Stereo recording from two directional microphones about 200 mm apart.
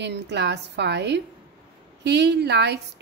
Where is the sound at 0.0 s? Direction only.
60° right (ahead or behind).